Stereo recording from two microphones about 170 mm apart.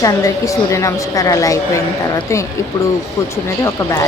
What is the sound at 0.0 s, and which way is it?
A woman's voice, 20° left (ahead or behind).